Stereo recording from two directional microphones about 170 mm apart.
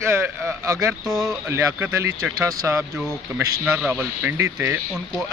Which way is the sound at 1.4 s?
15° right (ahead or behind).